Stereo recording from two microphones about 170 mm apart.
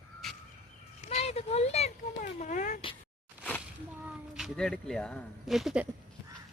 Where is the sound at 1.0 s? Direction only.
40° left (ahead or behind).